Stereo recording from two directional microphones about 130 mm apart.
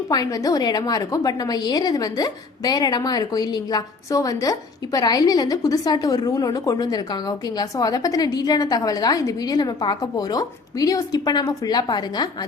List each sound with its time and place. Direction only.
0.1 s a woman's voice: 30° left (ahead or behind)